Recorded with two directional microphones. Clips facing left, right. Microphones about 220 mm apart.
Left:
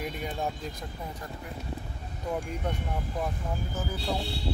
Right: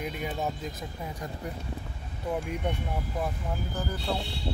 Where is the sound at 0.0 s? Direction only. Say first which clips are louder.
Right 1 dB; 5° right (ahead or behind).